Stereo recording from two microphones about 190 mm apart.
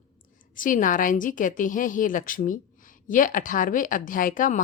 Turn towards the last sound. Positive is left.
turn(degrees=45)  # may be behind; listen again after turning